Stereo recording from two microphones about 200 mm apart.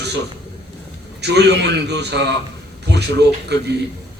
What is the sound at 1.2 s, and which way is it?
A man's voice, 60° right (ahead or behind).